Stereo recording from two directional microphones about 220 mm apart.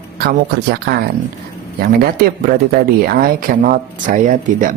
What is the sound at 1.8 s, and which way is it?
Speech, 40° right (ahead or behind).